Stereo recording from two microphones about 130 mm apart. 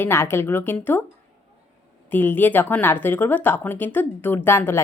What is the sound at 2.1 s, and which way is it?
A woman's voice, 15° left (ahead or behind).